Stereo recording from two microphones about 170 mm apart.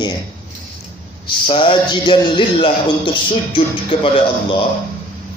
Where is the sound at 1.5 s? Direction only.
30° left (ahead or behind).